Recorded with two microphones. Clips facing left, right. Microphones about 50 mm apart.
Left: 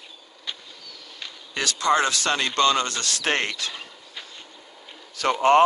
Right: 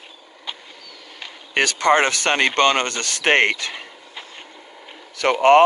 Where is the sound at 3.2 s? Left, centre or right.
Right.